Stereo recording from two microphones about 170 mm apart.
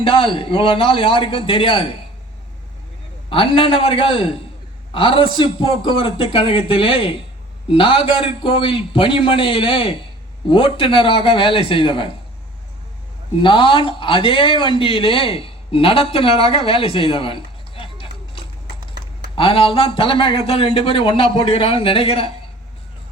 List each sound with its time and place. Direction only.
0.0 s speech: 30° left (ahead or behind)
3.2 s speech: 30° left (ahead or behind)
13.4 s speech: 30° left (ahead or behind)
19.4 s speech: 30° left (ahead or behind)